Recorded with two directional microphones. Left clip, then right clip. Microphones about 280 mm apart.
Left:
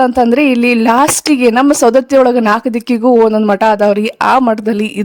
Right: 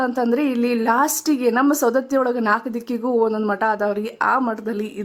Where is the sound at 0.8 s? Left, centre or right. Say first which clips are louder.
Left 8 dB; left.